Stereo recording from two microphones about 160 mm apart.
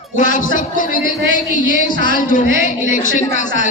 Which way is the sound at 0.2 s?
55° left (ahead or behind).